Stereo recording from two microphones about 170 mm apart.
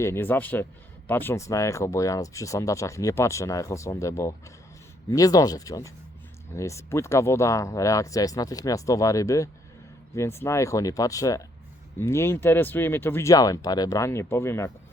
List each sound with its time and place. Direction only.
0.0 s speech: 15° left (ahead or behind)